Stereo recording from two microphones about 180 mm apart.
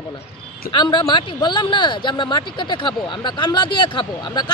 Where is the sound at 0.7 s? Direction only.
25° left (ahead or behind).